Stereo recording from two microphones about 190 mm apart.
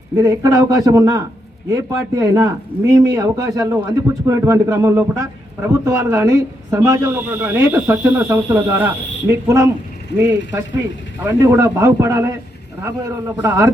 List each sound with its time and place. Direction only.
0.2 s speech: 20° right (ahead or behind)
10.2 s speech: 10° right (ahead or behind)